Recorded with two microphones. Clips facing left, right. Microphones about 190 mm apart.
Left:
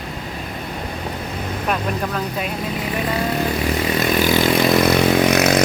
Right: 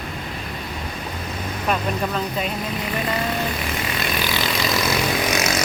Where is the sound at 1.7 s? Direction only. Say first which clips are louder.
Even; 5° left (ahead or behind).